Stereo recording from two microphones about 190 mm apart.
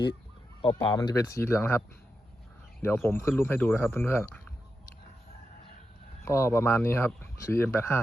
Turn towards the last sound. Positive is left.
turn(degrees=15)  # may be behind; listen again after turning